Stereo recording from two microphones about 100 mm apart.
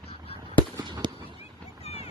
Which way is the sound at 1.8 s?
90° left.